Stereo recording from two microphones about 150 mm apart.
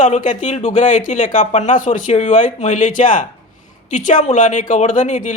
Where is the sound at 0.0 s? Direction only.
55° left (ahead or behind).